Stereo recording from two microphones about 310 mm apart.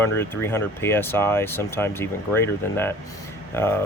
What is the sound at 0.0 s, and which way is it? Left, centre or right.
Speech, centre.